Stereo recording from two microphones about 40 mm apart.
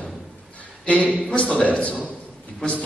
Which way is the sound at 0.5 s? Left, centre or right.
Left.